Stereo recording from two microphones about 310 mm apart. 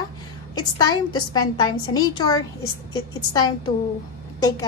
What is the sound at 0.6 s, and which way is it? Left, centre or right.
A woman's voice, centre.